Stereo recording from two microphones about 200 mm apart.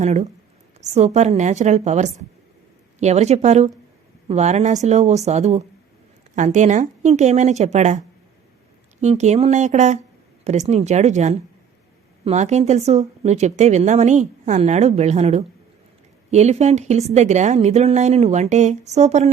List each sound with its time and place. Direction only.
0.0 s speech: 35° right (ahead or behind)